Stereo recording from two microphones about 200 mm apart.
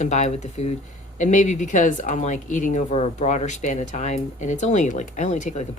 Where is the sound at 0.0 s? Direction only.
35° left (ahead or behind).